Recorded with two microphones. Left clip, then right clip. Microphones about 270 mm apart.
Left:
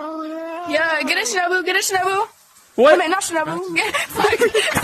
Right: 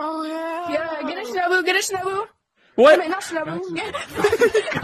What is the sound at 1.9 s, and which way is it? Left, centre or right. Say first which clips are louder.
A woman's voice: left 6 dB; left.